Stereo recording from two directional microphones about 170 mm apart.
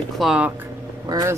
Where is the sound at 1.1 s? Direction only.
20° right (ahead or behind).